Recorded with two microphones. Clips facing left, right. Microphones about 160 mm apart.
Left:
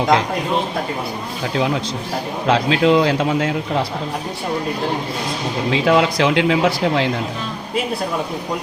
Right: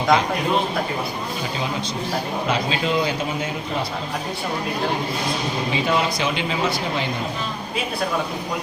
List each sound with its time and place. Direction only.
2.5 s speech: 80° left
5.7 s speech: 85° left